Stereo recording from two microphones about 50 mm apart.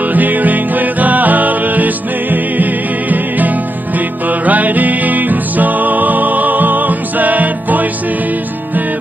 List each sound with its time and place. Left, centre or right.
0.0 s music: right